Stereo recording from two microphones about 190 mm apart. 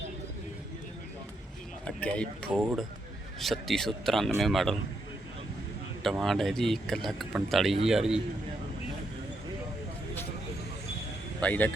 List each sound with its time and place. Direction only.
2.0 s speech: 5° left (ahead or behind)
6.0 s speech: centre (ahead or behind)
11.3 s a man's voice: 10° left (ahead or behind)